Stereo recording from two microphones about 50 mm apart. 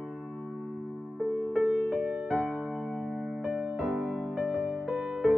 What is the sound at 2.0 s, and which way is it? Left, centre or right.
Music, centre.